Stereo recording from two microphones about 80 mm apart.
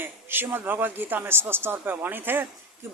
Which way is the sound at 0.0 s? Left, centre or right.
Right.